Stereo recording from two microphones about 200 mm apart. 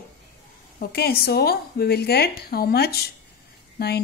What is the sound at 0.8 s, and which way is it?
A woman's voice, 50° left (ahead or behind).